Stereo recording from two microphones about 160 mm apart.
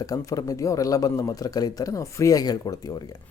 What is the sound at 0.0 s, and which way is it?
Speech, 20° left (ahead or behind).